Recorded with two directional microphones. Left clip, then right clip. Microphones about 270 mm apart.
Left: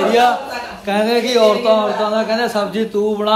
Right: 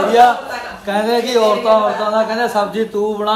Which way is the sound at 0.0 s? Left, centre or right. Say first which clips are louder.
Right 3 dB; centre.